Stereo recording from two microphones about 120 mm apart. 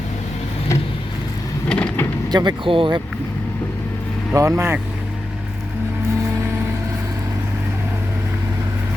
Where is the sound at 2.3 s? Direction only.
40° right (ahead or behind).